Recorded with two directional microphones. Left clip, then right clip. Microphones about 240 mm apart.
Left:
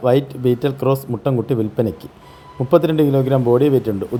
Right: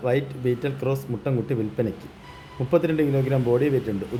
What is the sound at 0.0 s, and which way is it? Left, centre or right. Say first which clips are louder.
Speech: left 8 dB; left.